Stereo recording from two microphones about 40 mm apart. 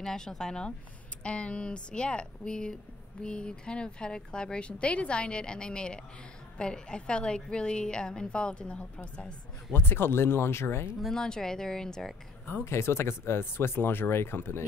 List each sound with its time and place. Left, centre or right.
0.0 s speech: centre
1.2 s speech: left
9.8 s speech: left
11.1 s speech: centre
12.8 s speech: left